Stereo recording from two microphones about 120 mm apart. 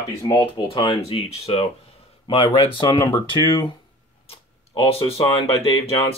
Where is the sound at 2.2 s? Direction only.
40° left (ahead or behind).